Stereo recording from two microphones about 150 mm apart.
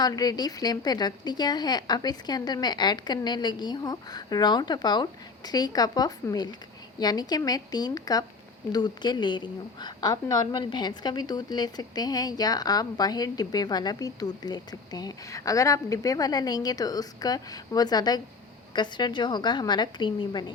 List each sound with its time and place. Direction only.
0.0 s a woman's voice: 25° left (ahead or behind)